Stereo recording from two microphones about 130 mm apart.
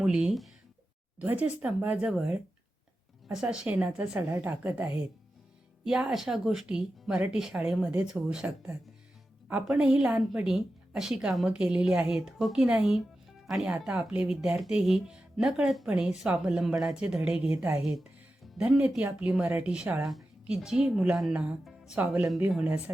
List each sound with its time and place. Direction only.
0.0 s speech: 5° right (ahead or behind)
9.5 s speech: 10° right (ahead or behind)